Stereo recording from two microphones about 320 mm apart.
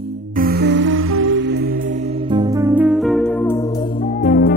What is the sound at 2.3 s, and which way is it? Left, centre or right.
Music, centre.